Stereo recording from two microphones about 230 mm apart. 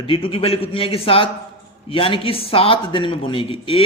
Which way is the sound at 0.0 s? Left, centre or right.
Left.